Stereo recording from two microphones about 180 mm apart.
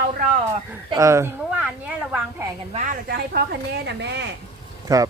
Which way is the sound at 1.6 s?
5° right (ahead or behind).